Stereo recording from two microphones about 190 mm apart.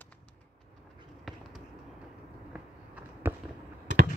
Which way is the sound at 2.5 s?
5° right (ahead or behind).